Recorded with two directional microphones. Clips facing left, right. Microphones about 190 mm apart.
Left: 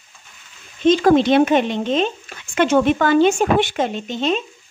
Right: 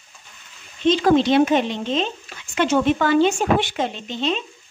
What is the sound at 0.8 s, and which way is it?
Speech, 50° left (ahead or behind).